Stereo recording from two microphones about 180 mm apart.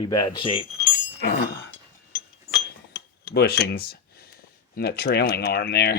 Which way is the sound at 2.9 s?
65° left (ahead or behind).